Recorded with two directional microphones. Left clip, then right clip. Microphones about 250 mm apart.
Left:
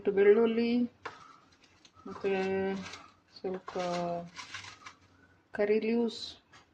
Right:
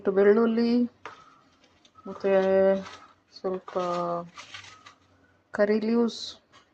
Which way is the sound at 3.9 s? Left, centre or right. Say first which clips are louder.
Right 4 dB; centre.